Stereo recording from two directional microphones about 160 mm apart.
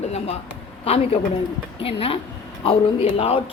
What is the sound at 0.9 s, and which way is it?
Speech, 40° left (ahead or behind).